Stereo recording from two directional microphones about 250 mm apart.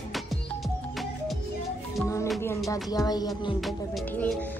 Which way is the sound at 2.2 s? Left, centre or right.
Centre.